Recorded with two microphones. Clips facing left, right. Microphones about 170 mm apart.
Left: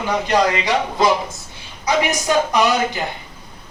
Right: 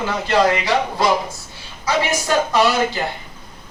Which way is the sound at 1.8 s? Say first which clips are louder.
Left 1 dB; 15° left (ahead or behind).